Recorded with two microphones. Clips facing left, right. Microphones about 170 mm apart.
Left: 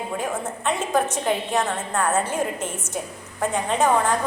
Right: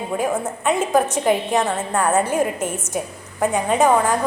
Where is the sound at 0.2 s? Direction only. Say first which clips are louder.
Right 5 dB; 10° right (ahead or behind).